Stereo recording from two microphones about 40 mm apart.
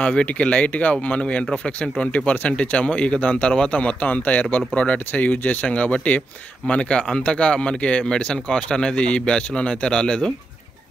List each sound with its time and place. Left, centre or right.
0.0 s speech: left
4.2 s a man's voice: left